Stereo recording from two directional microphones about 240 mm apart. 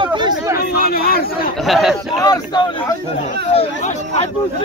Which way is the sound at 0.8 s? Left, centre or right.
Left.